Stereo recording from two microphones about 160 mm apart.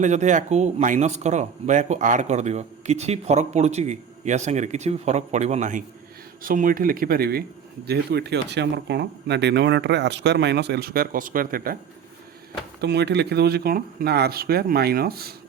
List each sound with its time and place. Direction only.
0.0 s speech: 50° right (ahead or behind)
6.4 s speech: 60° right (ahead or behind)
7.9 s speech: 90° right; by 11.8 s 65° right (ahead or behind)
12.8 s speech: 90° right; by 15.4 s 75° right (ahead or behind)